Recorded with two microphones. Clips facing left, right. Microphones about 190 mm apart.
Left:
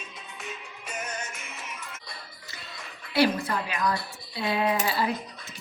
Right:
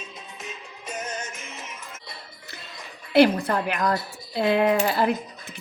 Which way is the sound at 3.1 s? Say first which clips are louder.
Right 6 dB; 55° right (ahead or behind).